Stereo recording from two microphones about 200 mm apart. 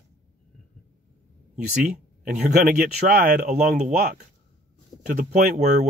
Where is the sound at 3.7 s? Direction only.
35° right (ahead or behind).